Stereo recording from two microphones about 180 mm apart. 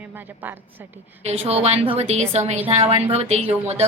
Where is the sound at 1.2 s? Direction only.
35° right (ahead or behind).